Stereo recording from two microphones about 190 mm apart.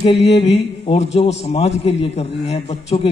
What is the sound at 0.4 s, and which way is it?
A man's voice, 30° left (ahead or behind).